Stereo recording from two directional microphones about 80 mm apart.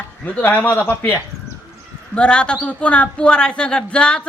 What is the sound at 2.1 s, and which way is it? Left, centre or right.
A man's voice, centre.